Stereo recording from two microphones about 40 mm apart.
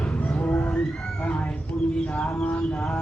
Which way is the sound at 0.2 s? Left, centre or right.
Left.